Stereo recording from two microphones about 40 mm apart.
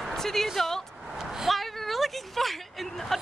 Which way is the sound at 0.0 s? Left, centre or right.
Centre.